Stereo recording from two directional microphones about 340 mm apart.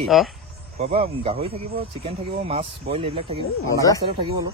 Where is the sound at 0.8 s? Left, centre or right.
Centre.